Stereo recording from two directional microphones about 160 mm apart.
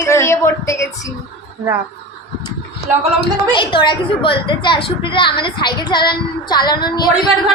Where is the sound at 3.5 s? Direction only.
30° left (ahead or behind).